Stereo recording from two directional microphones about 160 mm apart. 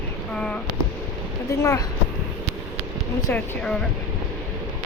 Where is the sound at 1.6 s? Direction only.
20° left (ahead or behind).